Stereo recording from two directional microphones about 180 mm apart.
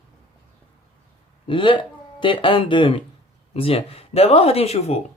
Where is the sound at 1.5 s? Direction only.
25° left (ahead or behind).